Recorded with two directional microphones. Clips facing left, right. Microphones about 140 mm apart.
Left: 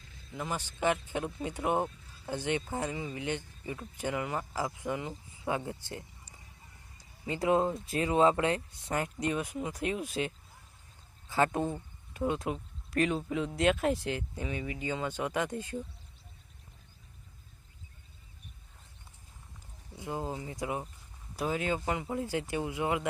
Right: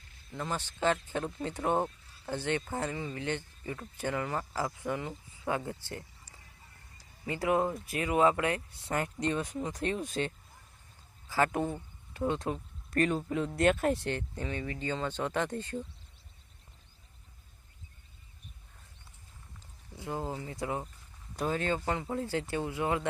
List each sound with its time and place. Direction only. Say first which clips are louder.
0.3 s speech: even; 10° left (ahead or behind)
11.3 s speech: even; 20° left (ahead or behind)
12.2 s speech: even; 10° left (ahead or behind)
20.0 s speech: even; 15° left (ahead or behind)